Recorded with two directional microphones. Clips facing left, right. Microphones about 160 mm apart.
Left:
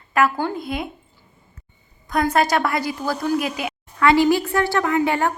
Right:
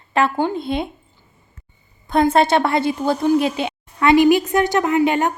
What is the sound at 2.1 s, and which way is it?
A woman's voice, 25° right (ahead or behind).